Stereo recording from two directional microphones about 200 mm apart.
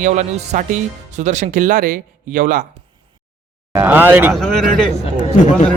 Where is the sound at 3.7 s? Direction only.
10° right (ahead or behind).